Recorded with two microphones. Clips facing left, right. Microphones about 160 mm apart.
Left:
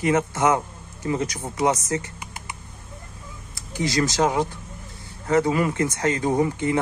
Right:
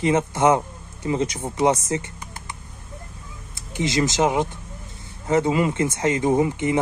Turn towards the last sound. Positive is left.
turn(degrees=-20)  # may be behind; listen again after turning